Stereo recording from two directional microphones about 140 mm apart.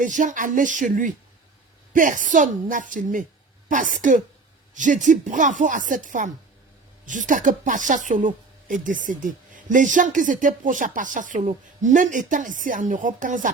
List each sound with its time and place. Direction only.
0.0 s a woman's voice: 65° right (ahead or behind)